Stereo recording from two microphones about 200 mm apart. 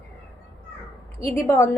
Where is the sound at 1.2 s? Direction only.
15° left (ahead or behind).